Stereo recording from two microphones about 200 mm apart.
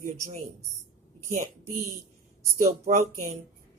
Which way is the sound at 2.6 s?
35° right (ahead or behind).